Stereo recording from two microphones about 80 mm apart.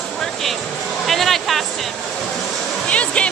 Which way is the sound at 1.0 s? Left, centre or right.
Centre.